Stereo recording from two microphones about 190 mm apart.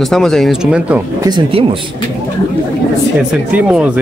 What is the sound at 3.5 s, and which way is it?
Speech, 5° right (ahead or behind).